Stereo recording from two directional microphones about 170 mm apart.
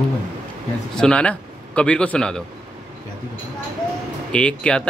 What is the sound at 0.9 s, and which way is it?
A man's voice, 5° left (ahead or behind).